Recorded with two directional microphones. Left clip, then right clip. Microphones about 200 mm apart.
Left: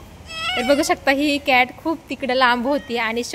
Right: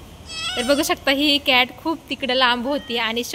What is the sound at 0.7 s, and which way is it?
A woman's voice, 10° left (ahead or behind).